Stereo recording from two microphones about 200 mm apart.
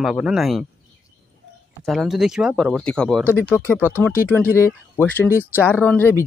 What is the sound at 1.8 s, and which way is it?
Speech, centre (ahead or behind).